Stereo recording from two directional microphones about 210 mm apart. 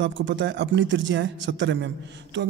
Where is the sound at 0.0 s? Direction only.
60° right (ahead or behind).